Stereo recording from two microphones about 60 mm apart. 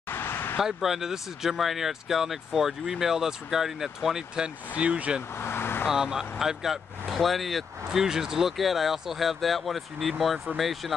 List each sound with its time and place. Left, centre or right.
0.1 s a sound: left
0.6 s speech: centre
4.7 s speech: right
5.4 s vehicle: left
5.9 s speech: centre